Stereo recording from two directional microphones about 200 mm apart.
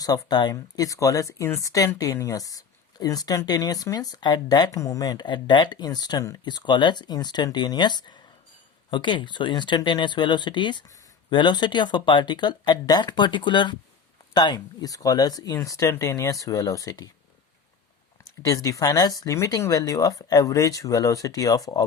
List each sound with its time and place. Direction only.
0.0 s speech: 20° left (ahead or behind)
18.4 s speech: 15° left (ahead or behind)